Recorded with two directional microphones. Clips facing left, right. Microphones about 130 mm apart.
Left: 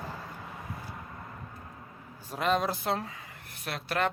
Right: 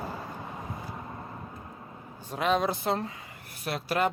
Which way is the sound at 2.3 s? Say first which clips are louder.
Right 2 dB; centre (ahead or behind).